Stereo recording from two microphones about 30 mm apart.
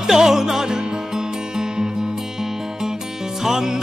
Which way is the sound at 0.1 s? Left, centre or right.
Centre.